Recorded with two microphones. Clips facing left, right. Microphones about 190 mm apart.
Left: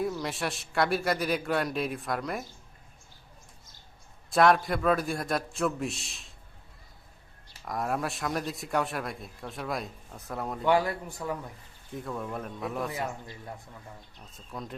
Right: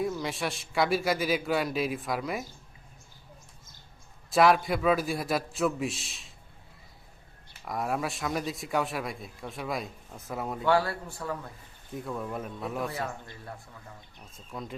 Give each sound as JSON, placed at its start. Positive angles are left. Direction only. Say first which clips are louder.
{"t": 0.0, "sound": "speech", "louder": "even", "side_deg": 0}
{"t": 4.3, "sound": "speech", "louder": "even", "side_deg": 0}
{"t": 7.6, "sound": "speech", "louder": "even", "side_deg": 0}
{"t": 10.7, "sound": "a man's voice", "louder": "left 1 dB", "side_deg": 15}
{"t": 11.9, "sound": "speech", "louder": "right 1 dB", "side_deg": 0}
{"t": 12.9, "sound": "a man's voice", "louder": "left 1 dB", "side_deg": 15}
{"t": 14.3, "sound": "speech", "louder": "right 1 dB", "side_deg": 0}